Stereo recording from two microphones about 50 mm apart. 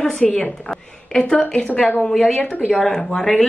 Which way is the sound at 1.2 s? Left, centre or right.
Centre.